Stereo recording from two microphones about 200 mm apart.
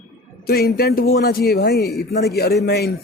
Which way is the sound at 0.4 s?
50° left (ahead or behind).